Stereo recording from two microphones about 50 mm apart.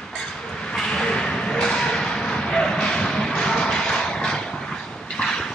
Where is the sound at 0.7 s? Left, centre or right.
Centre.